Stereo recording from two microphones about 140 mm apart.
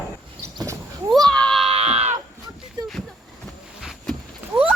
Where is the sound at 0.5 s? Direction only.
25° right (ahead or behind).